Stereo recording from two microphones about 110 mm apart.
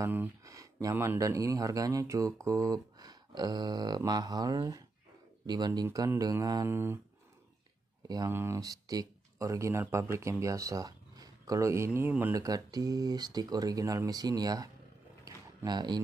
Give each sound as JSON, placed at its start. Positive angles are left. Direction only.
{"t": 0.0, "sound": "speech", "side_deg": -20}
{"t": 0.4, "sound": "speech", "side_deg": -30}
{"t": 5.9, "sound": "speech", "side_deg": -35}
{"t": 6.7, "sound": "speech", "side_deg": -20}
{"t": 8.3, "sound": "speech", "side_deg": -25}
{"t": 12.4, "sound": "speech", "side_deg": -35}
{"t": 15.2, "sound": "a sound", "side_deg": -40}